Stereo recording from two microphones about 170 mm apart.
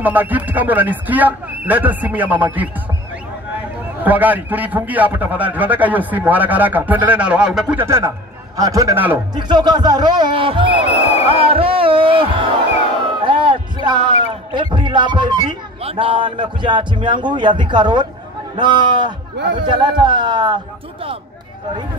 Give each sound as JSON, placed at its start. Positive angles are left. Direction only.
{"t": 0.0, "sound": "a man's voice", "side_deg": -10}
{"t": 4.0, "sound": "a man's voice", "side_deg": -10}
{"t": 9.3, "sound": "speech", "side_deg": -25}
{"t": 13.2, "sound": "a sound", "side_deg": -30}
{"t": 14.5, "sound": "speech", "side_deg": -25}